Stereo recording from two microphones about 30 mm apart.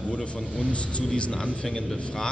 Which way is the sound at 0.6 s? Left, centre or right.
Left.